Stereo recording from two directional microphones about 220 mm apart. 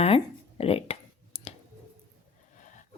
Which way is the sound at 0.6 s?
25° left (ahead or behind).